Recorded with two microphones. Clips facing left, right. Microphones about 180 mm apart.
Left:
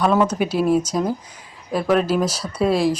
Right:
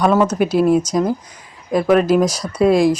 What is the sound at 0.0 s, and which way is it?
Speech, 5° right (ahead or behind).